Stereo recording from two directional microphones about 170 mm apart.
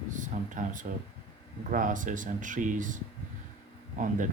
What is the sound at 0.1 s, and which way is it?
Speech, 45° right (ahead or behind).